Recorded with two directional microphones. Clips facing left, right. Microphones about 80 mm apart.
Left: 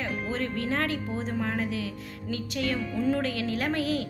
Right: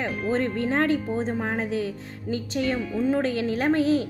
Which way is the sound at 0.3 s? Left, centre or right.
Right.